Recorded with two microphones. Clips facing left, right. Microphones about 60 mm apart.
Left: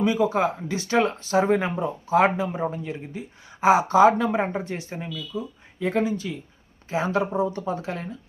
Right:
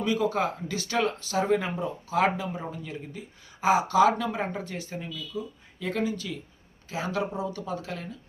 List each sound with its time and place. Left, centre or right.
0.0 s speech: left